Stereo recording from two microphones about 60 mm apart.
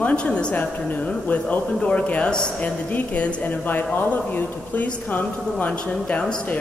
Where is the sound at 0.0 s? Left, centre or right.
Centre.